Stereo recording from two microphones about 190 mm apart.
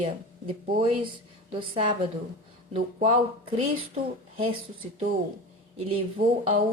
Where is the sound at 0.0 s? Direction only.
30° right (ahead or behind).